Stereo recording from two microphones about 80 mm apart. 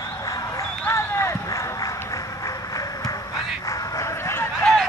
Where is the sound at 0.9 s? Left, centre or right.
Left.